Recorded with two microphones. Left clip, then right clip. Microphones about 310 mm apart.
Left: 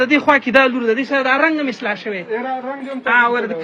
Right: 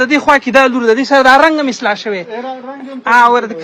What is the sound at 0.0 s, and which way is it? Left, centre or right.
A man's voice, centre.